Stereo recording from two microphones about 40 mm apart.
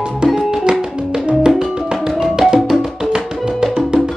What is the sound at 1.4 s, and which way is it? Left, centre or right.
Music, centre.